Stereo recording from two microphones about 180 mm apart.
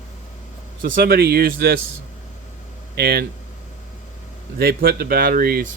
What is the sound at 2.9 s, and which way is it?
Speech, 60° right (ahead or behind).